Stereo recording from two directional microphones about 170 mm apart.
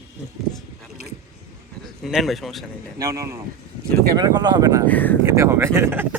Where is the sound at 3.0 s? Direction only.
20° right (ahead or behind).